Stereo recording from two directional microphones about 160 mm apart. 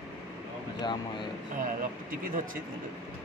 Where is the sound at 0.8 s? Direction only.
30° left (ahead or behind).